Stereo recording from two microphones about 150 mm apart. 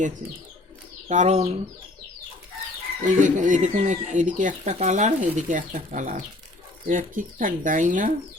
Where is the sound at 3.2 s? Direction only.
60° right (ahead or behind).